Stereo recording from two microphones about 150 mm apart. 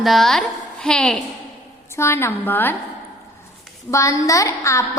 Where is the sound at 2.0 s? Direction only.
15° left (ahead or behind).